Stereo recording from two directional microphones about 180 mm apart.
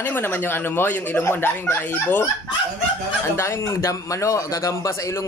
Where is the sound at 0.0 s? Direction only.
10° left (ahead or behind).